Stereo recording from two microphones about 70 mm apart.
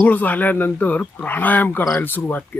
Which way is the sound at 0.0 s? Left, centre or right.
Left.